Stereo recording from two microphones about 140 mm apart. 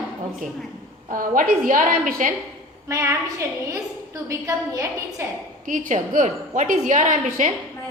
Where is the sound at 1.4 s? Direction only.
75° right (ahead or behind).